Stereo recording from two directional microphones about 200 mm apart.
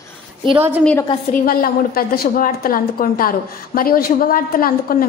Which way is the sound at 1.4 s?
50° left (ahead or behind).